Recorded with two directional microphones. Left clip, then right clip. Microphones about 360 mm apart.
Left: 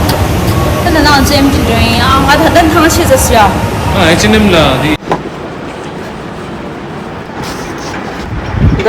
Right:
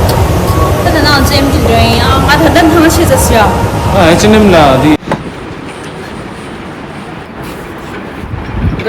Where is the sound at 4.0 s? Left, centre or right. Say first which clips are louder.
Right 2 dB; centre.